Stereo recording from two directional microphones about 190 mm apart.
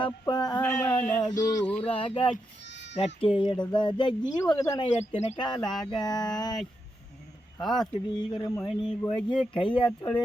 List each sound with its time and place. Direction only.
0.0 s speech: 25° left (ahead or behind)
0.6 s a sound: 10° left (ahead or behind)
1.7 s speech: 30° left (ahead or behind)
2.6 s bleat: 65° left (ahead or behind)
3.2 s speech: 25° left (ahead or behind)
5.5 s speech: 20° left (ahead or behind)
7.6 s speech: centre (ahead or behind)
8.1 s speech: 20° left (ahead or behind)
8.7 s speech: 5° left (ahead or behind)
9.5 s speech: 25° left (ahead or behind)